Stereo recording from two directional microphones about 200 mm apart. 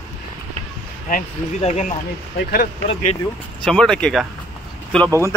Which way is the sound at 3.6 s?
5° left (ahead or behind).